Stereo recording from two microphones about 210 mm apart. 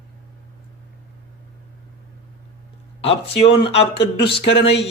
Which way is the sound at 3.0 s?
25° left (ahead or behind).